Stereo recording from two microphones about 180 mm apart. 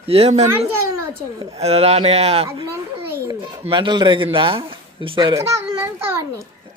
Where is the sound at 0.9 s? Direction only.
15° right (ahead or behind).